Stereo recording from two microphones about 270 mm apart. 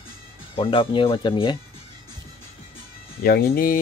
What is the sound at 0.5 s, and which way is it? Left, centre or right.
Speech, centre.